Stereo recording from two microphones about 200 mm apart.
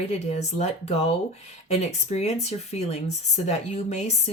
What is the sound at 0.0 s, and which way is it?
Speech, 35° left (ahead or behind).